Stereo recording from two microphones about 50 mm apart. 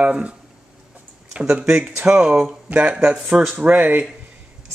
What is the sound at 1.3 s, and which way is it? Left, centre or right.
Speech, centre.